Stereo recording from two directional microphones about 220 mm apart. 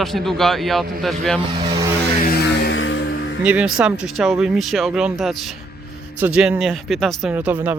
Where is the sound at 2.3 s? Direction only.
55° left (ahead or behind).